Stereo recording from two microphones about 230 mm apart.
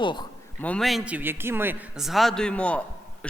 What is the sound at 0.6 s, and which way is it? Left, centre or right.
A man's voice, centre.